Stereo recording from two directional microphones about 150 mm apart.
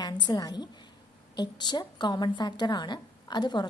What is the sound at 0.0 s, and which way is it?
A woman's voice, 30° left (ahead or behind).